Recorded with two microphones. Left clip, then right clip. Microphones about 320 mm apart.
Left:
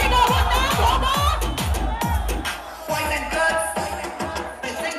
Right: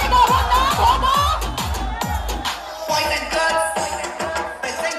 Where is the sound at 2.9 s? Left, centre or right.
Right.